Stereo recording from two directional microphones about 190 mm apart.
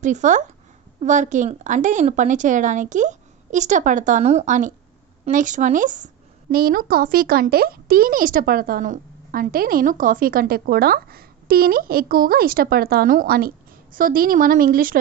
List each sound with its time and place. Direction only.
0.0 s a woman's voice: 40° right (ahead or behind)